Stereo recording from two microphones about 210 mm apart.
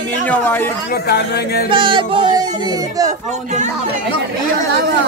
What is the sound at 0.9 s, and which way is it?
Speech, 50° left (ahead or behind).